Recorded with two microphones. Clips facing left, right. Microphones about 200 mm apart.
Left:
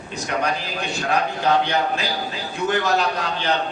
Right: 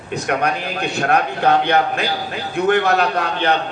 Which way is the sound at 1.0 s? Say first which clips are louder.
Right 5 dB; 60° right (ahead or behind).